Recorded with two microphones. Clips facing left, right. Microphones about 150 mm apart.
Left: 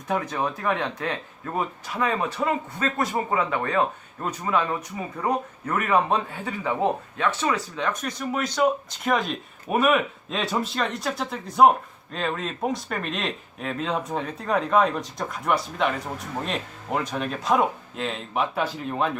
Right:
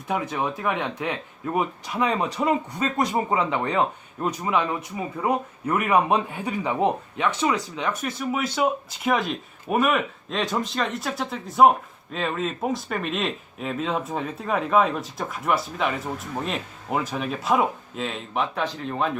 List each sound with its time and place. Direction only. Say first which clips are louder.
0.1 s speech: even; 10° right (ahead or behind)